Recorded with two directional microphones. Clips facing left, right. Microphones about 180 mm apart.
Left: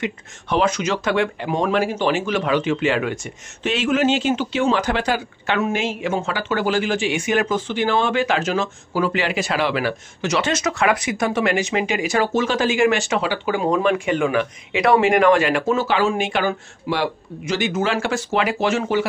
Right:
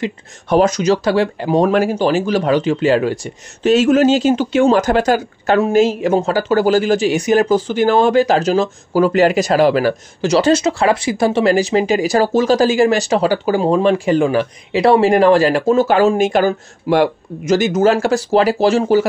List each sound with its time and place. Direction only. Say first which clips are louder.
0.0 s speech: right 4 dB; 40° right (ahead or behind)